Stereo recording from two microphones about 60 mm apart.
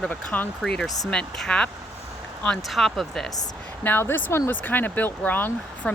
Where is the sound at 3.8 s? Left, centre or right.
Left.